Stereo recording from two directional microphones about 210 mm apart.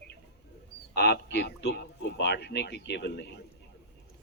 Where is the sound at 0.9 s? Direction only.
50° left (ahead or behind).